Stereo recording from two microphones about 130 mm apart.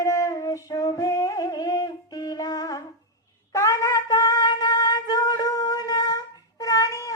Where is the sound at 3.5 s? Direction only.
25° left (ahead or behind).